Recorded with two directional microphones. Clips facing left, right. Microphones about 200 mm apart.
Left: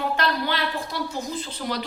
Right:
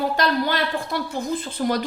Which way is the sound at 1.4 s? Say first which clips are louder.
Right 6 dB; 50° right (ahead or behind).